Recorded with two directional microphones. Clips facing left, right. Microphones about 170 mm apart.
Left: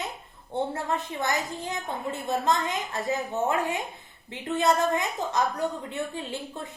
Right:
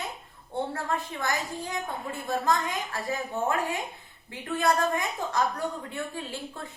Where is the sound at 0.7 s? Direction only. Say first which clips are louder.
Left 1 dB; 20° left (ahead or behind).